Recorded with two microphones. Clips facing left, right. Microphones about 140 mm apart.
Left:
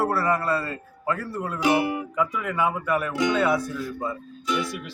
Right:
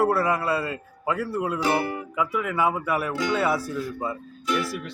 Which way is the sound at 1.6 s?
15° left (ahead or behind).